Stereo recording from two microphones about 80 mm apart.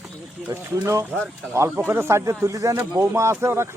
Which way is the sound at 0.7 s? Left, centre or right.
Right.